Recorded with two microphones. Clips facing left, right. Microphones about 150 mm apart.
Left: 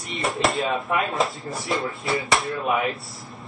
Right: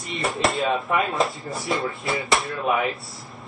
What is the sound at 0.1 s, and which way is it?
A man's voice, centre (ahead or behind).